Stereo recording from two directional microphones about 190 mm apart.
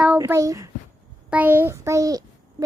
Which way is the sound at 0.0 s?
10° right (ahead or behind).